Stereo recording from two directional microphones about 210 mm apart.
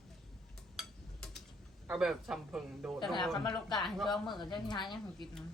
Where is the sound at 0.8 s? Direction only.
Centre (ahead or behind).